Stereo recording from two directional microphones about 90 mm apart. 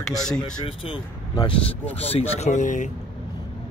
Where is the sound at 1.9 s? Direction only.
90° left.